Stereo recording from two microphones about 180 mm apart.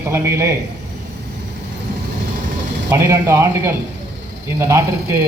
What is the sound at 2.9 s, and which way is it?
A man's voice, 15° right (ahead or behind).